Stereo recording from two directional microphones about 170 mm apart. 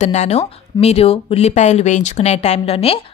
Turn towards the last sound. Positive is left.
turn(degrees=35)  # may be behind; listen again after turning